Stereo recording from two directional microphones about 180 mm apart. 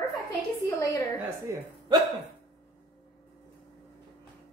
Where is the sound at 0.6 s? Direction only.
20° left (ahead or behind).